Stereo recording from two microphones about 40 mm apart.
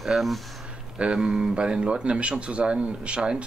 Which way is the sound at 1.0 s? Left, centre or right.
Centre.